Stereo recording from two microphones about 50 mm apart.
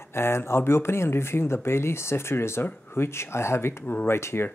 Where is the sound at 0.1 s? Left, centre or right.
Left.